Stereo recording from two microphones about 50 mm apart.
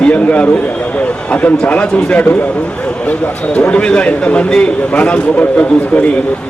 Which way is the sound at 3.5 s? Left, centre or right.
Left.